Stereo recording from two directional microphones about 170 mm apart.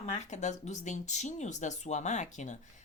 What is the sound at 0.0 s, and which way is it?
Speech, 45° left (ahead or behind).